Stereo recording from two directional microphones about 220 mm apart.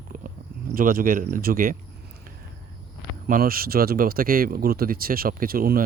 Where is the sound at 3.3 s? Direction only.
40° right (ahead or behind).